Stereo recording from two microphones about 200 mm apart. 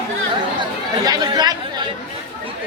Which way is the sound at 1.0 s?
20° right (ahead or behind).